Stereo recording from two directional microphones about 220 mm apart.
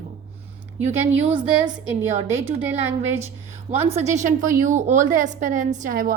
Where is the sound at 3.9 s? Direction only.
30° right (ahead or behind).